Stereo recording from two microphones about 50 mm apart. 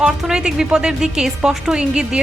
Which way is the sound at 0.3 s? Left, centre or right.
Centre.